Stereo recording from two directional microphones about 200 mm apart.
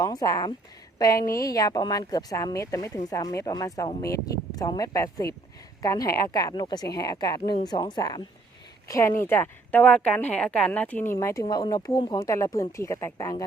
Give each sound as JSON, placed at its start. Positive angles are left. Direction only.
{"t": 0.0, "sound": "a woman's voice", "side_deg": 20}